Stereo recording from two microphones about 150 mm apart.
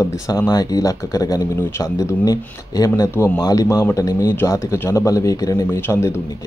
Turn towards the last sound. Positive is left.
turn(degrees=15)  # may be behind; listen again after turning